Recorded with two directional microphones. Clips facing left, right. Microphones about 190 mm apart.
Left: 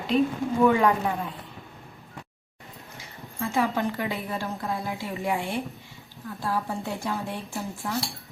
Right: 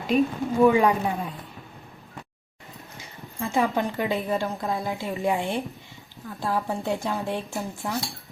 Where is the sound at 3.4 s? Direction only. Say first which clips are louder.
Right 1 dB; 20° right (ahead or behind).